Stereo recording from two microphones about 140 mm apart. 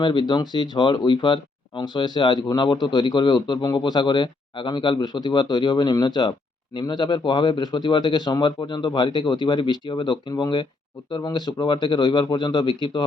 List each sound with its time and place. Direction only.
0.0 s speech: 35° left (ahead or behind)